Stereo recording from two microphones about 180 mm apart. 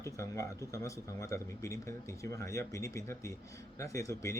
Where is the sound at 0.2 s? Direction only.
15° left (ahead or behind).